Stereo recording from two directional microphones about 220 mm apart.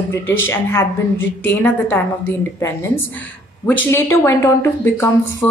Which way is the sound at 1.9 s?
10° left (ahead or behind).